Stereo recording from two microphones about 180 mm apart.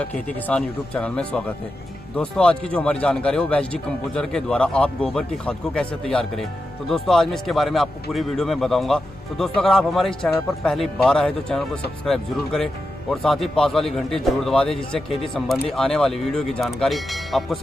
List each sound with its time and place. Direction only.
0.0 s a man's voice: 5° left (ahead or behind)